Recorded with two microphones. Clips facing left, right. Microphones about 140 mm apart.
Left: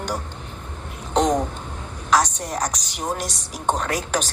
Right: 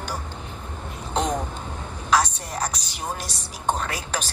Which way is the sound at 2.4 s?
40° left (ahead or behind).